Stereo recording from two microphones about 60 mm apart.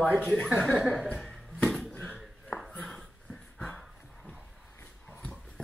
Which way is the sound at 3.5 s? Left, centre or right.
Centre.